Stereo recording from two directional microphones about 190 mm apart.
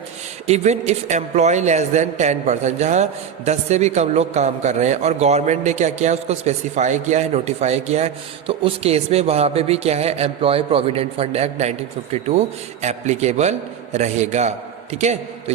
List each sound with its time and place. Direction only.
0.4 s a man's voice: 35° right (ahead or behind)